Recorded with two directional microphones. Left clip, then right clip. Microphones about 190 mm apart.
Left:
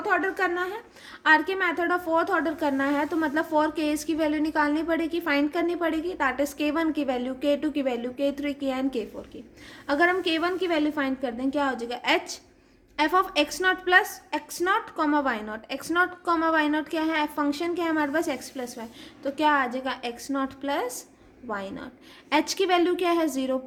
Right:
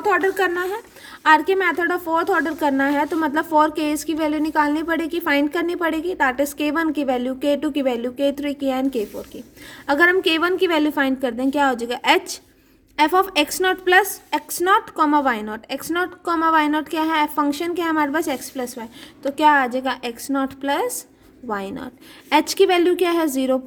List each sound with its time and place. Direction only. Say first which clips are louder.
0.0 s a woman's voice: right 6 dB; 45° right (ahead or behind)